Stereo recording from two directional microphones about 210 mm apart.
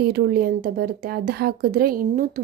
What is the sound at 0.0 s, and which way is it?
A woman's voice, 50° right (ahead or behind).